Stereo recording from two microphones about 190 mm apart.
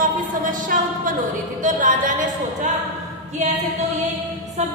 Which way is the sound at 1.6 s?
45° right (ahead or behind).